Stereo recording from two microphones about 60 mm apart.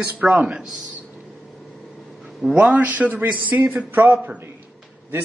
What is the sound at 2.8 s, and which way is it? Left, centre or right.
Speech, right.